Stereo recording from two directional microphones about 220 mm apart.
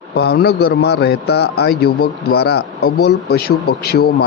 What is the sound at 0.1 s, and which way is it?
Speech, 45° left (ahead or behind).